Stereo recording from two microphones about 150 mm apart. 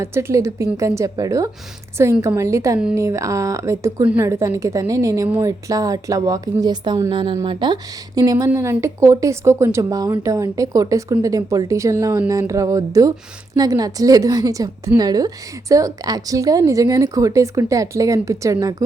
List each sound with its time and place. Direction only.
0.0 s speech: 15° right (ahead or behind)
8.4 s speech: 15° right (ahead or behind)